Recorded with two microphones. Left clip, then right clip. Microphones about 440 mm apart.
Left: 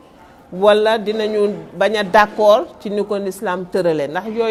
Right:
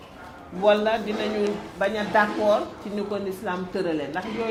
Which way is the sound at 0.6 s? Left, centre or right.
Left.